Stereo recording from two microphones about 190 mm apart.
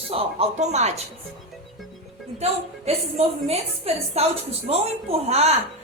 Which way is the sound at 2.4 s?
35° right (ahead or behind).